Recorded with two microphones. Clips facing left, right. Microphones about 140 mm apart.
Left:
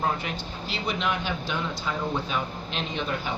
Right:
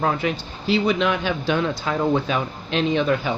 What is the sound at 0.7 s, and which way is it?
A man's voice, 90° right.